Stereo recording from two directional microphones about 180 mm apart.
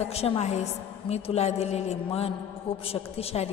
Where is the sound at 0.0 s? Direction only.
35° left (ahead or behind).